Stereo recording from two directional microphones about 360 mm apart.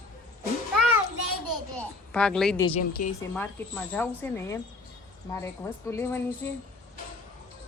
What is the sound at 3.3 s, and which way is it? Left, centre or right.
A woman's voice, centre.